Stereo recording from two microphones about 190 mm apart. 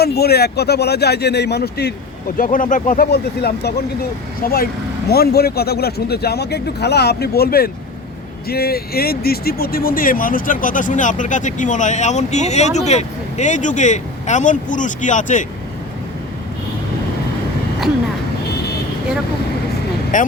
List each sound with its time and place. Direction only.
0.0 s speech: 55° left (ahead or behind)
2.4 s speech: 45° left (ahead or behind)
20.1 s speech: 45° left (ahead or behind)